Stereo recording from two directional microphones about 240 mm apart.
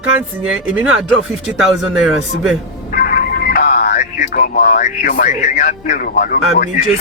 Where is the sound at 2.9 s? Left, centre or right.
Left.